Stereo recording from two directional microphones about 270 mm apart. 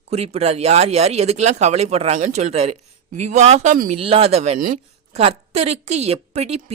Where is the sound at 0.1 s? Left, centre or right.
Right.